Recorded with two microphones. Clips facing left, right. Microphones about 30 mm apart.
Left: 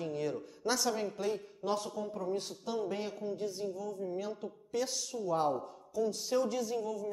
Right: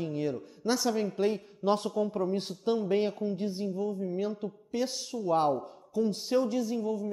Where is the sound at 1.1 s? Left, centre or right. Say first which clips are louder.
Right 6 dB; right.